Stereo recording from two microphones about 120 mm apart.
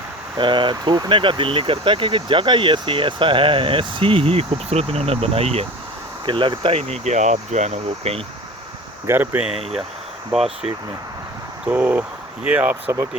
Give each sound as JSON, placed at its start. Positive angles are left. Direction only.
{"t": 0.3, "sound": "speech", "side_deg": -40}
{"t": 6.2, "sound": "speech", "side_deg": -40}
{"t": 9.0, "sound": "speech", "side_deg": -15}
{"t": 10.3, "sound": "speech", "side_deg": 0}
{"t": 11.6, "sound": "speech", "side_deg": -15}